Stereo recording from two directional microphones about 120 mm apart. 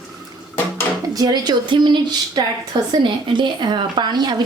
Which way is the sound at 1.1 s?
35° right (ahead or behind).